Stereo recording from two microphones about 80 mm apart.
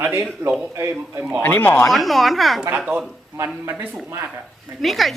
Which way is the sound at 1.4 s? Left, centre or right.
Left.